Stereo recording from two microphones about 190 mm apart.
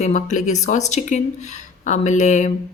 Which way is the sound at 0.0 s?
40° left (ahead or behind).